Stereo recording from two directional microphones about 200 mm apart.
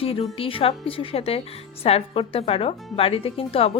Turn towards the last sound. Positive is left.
turn(degrees=30)  # may be behind; listen again after turning